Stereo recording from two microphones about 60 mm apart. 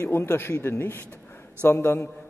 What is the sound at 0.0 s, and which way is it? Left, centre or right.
Speech, left.